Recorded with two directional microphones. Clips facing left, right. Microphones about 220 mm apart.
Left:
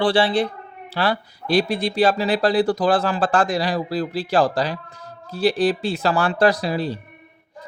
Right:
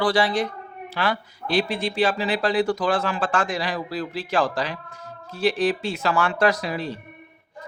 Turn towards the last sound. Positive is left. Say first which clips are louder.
# left 4 dB
turn(degrees=35)  # may be behind; listen again after turning